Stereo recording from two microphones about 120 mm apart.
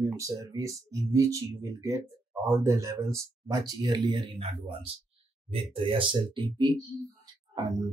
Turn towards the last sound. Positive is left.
turn(degrees=-30)  # may be behind; listen again after turning